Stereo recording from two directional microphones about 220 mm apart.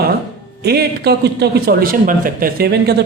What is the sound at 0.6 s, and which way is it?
A man's voice, 45° right (ahead or behind).